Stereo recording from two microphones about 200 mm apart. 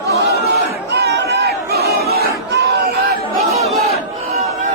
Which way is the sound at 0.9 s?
55° right (ahead or behind).